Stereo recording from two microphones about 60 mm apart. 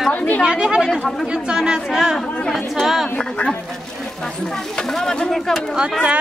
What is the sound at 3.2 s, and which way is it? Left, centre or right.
Speech, centre.